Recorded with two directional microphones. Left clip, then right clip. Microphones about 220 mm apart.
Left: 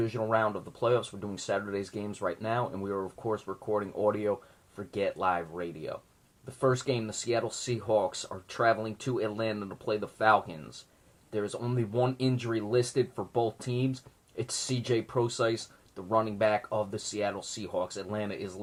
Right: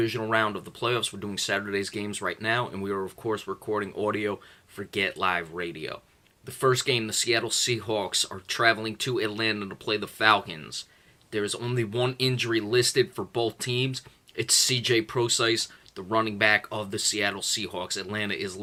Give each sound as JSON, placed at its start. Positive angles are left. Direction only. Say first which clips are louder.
{"t": 0.3, "sound": "speech", "louder": "right 3 dB", "side_deg": -15}
{"t": 2.8, "sound": "speech", "louder": "right 3 dB", "side_deg": -30}
{"t": 3.3, "sound": "speech", "louder": "right 1 dB", "side_deg": -20}